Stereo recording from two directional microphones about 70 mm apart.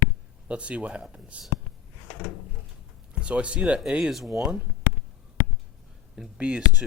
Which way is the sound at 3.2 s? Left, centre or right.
Centre.